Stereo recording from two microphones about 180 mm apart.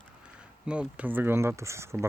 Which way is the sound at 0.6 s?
5° right (ahead or behind).